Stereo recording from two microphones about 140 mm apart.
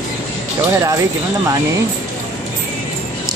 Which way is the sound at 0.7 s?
25° right (ahead or behind).